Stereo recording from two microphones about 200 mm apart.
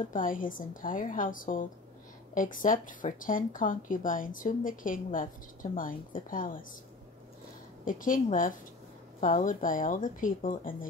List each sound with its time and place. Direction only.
0.0 s speech: 40° left (ahead or behind)
7.8 s speech: 40° left (ahead or behind)